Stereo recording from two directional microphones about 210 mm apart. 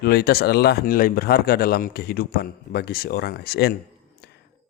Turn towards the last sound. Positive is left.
turn(degrees=50)  # may be behind; listen again after turning